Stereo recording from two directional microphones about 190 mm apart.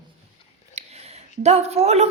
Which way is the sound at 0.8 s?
35° right (ahead or behind).